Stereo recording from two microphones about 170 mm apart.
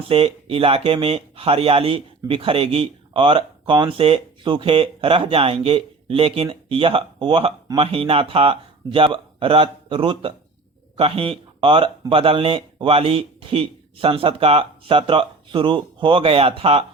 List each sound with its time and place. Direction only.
0.1 s speech: 35° right (ahead or behind)